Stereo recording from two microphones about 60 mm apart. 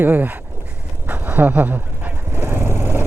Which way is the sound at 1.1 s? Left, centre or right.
Right.